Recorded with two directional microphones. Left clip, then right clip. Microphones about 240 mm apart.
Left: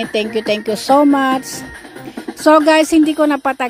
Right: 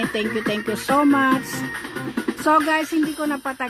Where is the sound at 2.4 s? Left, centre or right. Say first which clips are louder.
Left 9 dB; left.